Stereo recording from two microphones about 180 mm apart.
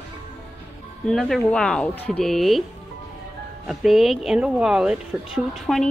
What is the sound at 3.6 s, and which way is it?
Speech, centre (ahead or behind).